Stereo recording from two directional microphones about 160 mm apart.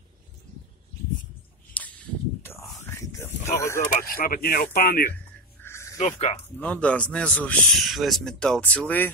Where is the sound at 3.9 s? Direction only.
65° left (ahead or behind).